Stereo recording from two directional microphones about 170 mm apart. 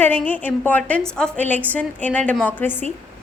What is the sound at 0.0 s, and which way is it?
A woman's voice, 10° left (ahead or behind).